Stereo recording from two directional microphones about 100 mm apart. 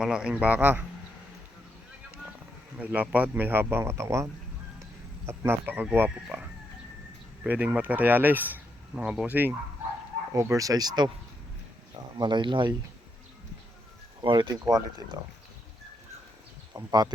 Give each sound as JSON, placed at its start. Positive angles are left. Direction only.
{"t": 0.0, "sound": "speech", "side_deg": -5}
{"t": 2.7, "sound": "speech", "side_deg": -15}
{"t": 7.4, "sound": "speech", "side_deg": -15}
{"t": 10.3, "sound": "speech", "side_deg": -35}
{"t": 12.1, "sound": "speech", "side_deg": -50}
{"t": 14.2, "sound": "speech", "side_deg": -45}
{"t": 16.7, "sound": "speech", "side_deg": -40}